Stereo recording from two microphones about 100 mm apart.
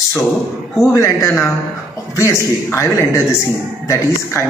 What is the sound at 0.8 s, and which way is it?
A man's voice, 35° left (ahead or behind).